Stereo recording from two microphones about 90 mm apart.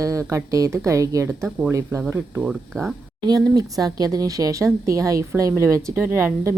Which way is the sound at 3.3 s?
45° right (ahead or behind).